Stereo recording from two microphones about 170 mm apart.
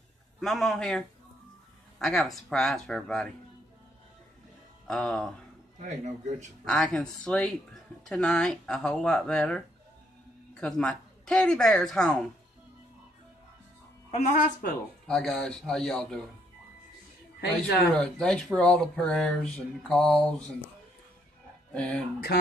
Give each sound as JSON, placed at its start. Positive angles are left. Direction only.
{"t": 0.4, "sound": "speech", "side_deg": 0}
{"t": 4.8, "sound": "speech", "side_deg": 5}
{"t": 5.8, "sound": "a man's voice", "side_deg": -45}
{"t": 6.6, "sound": "speech", "side_deg": 5}
{"t": 14.1, "sound": "speech", "side_deg": 50}
{"t": 15.0, "sound": "speech", "side_deg": 5}
{"t": 17.9, "sound": "speech", "side_deg": 5}
{"t": 21.7, "sound": "speech", "side_deg": 5}
{"t": 22.3, "sound": "speech", "side_deg": 70}